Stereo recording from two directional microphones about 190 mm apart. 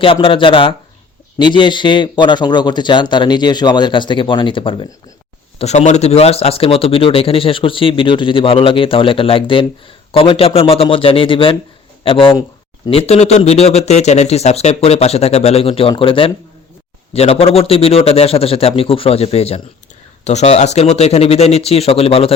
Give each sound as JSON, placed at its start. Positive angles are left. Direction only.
{"t": 0.0, "sound": "speech", "side_deg": 30}